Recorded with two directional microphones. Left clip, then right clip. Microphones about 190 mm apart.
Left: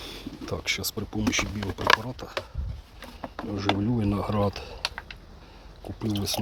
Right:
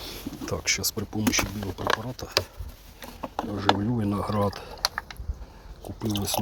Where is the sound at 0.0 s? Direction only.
Centre (ahead or behind).